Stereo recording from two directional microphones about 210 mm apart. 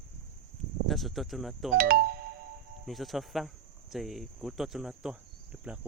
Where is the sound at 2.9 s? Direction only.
Centre (ahead or behind).